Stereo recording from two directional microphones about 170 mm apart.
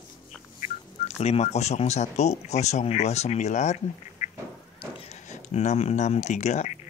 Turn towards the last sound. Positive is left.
turn(degrees=40)  # may be behind; listen again after turning